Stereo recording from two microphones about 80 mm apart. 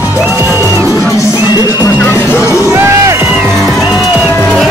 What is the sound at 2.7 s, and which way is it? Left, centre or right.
Music, right.